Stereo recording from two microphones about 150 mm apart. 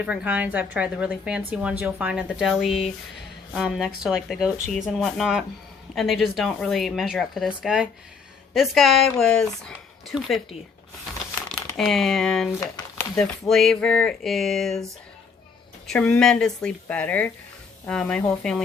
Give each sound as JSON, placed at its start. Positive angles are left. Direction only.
{"t": 0.0, "sound": "a woman's voice", "side_deg": -5}
{"t": 11.8, "sound": "speech", "side_deg": 0}
{"t": 13.5, "sound": "speech", "side_deg": 0}
{"t": 15.9, "sound": "speech", "side_deg": 10}